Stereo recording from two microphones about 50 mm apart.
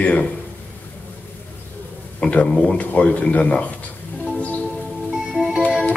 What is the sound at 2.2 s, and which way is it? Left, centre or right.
A man's voice, left.